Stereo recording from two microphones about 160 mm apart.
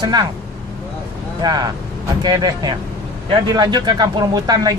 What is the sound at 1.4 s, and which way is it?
Speech, 25° right (ahead or behind).